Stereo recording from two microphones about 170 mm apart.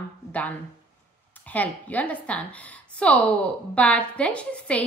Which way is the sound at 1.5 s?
10° left (ahead or behind).